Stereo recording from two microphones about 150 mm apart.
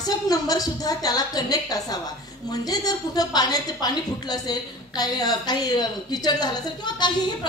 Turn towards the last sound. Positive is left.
turn(degrees=30)  # may be behind; listen again after turning